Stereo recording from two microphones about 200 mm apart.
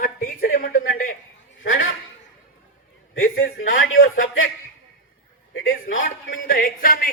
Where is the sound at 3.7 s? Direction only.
75° left (ahead or behind).